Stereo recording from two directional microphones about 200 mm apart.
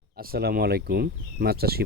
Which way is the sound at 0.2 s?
50° right (ahead or behind).